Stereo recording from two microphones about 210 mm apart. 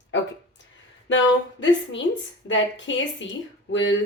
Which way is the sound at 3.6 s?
60° left (ahead or behind).